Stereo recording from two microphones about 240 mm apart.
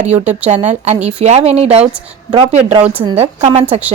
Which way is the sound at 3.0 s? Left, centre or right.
Right.